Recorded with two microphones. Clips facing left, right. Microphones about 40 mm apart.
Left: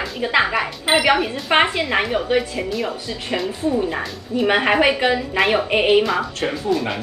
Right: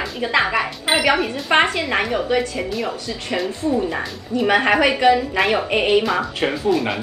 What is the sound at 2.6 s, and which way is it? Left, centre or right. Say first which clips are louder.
Speech: even; centre.